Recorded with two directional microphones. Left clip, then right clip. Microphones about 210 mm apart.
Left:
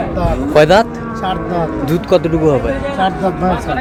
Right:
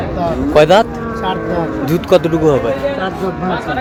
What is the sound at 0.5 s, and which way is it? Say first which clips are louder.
A man's voice: even; centre (ahead or behind).